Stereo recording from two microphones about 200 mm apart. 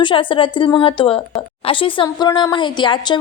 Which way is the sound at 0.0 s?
25° left (ahead or behind).